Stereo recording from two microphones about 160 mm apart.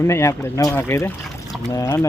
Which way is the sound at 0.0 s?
15° left (ahead or behind).